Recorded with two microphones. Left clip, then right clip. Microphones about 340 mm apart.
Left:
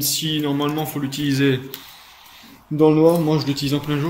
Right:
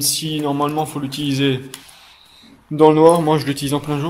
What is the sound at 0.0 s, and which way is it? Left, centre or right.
Speech, centre.